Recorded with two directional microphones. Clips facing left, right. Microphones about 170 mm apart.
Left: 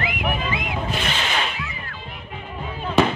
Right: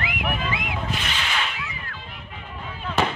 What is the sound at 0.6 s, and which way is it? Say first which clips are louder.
Music: left 3 dB; 25° left (ahead or behind).